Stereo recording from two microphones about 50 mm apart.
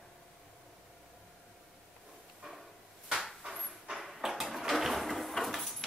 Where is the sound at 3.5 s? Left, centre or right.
Centre.